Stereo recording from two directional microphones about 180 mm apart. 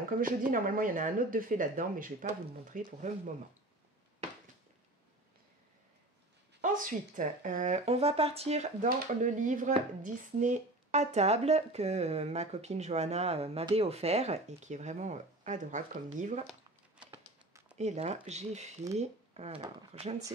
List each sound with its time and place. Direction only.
0.1 s speech: 50° right (ahead or behind)
6.6 s speech: 45° right (ahead or behind)
8.8 s speech: 50° right (ahead or behind)
17.7 s speech: 40° right (ahead or behind)